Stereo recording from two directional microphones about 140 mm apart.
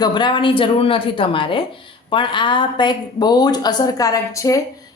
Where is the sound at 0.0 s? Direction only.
35° left (ahead or behind).